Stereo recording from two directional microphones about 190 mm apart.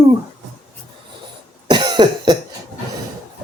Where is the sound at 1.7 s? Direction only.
25° right (ahead or behind).